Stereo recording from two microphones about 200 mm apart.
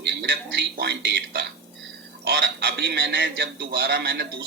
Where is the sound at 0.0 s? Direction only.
60° right (ahead or behind).